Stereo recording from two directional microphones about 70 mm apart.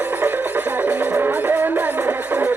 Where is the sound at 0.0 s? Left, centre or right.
Right.